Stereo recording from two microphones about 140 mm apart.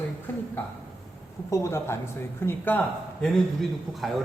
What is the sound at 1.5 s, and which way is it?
A woman's voice, 20° left (ahead or behind).